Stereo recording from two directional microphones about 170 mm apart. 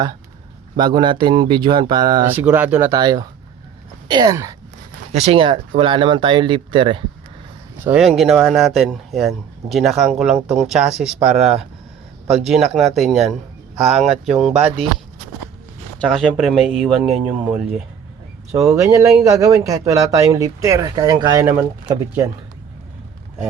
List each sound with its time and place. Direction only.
0.8 s a man's voice: 25° right (ahead or behind)
2.2 s speech: 10° right (ahead or behind)
2.9 s a man's voice: 25° right (ahead or behind)
5.1 s a man's voice: 35° right (ahead or behind)
7.9 s speech: centre (ahead or behind)
16.0 s speech: centre (ahead or behind)
18.5 s a man's voice: 20° right (ahead or behind)